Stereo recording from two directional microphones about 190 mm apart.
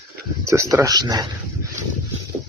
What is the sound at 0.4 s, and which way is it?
Speech, 15° right (ahead or behind).